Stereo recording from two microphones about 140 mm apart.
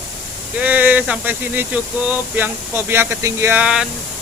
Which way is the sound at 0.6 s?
10° right (ahead or behind).